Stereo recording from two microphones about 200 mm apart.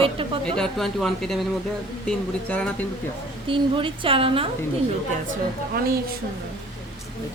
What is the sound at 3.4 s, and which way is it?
A woman's voice, 25° right (ahead or behind).